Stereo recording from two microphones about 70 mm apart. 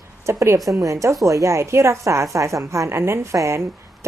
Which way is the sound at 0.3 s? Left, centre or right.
Right.